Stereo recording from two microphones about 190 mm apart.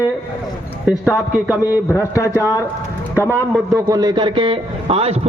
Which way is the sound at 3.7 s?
20° right (ahead or behind).